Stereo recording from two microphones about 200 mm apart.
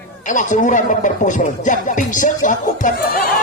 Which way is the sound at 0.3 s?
40° left (ahead or behind).